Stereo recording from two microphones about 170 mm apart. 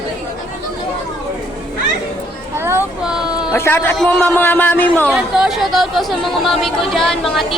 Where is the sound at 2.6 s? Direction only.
15° right (ahead or behind).